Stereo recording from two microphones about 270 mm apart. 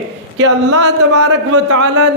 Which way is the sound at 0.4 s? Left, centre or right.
Right.